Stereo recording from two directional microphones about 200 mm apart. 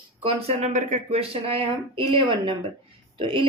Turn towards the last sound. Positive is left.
turn(degrees=-25)  # may be behind; listen again after turning